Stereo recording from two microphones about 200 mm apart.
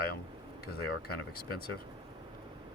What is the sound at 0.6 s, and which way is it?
Speech, 50° left (ahead or behind).